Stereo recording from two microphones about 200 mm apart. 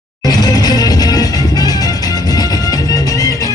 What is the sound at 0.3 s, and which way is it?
Music, 20° left (ahead or behind).